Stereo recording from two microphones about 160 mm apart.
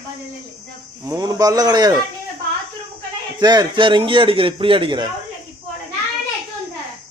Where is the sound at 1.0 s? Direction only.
20° right (ahead or behind).